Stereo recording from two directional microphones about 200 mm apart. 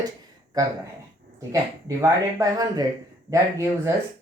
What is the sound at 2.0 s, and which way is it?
Speech, 15° right (ahead or behind).